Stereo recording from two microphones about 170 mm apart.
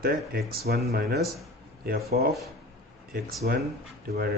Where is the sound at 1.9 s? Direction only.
65° right (ahead or behind).